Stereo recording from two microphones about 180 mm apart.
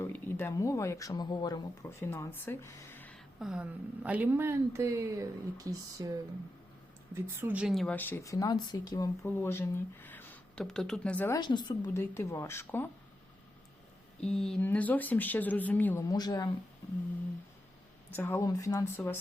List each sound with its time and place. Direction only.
0.0 s speech: 10° left (ahead or behind)
3.4 s speech: 5° right (ahead or behind)
7.1 s speech: 10° right (ahead or behind); by 11.3 s 10° left (ahead or behind)
11.3 s a woman's voice: 25° left (ahead or behind)
14.2 s speech: 5° left (ahead or behind)
16.0 s a woman's voice: 20° left (ahead or behind)
18.1 s speech: 10° left (ahead or behind)